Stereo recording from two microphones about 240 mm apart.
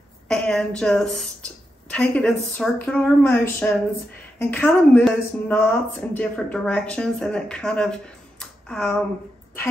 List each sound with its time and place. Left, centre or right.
0.3 s speech: centre